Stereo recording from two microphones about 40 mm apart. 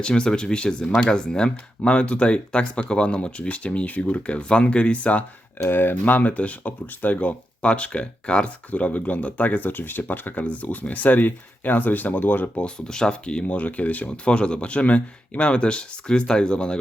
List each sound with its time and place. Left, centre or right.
0.0 s speech: left
5.6 s speech: left
5.9 s speech: left
12.7 s speech: centre
13.5 s speech: left
14.3 s speech: left